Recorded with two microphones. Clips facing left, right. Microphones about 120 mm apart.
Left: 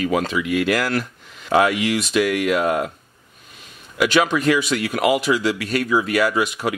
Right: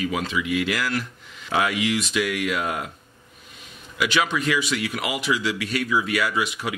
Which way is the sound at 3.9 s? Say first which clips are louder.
Left 5 dB; 50° left (ahead or behind).